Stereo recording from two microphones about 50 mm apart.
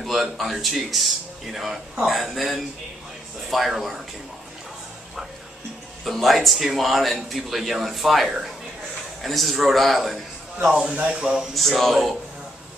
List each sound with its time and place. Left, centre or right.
0.0 s speech: centre
6.0 s speech: centre
10.6 s speech: right
11.3 s speech: centre